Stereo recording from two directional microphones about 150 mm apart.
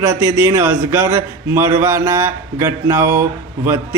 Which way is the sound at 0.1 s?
20° right (ahead or behind).